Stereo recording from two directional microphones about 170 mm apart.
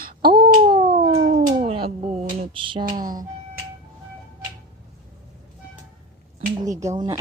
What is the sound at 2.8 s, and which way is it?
Music, 55° right (ahead or behind).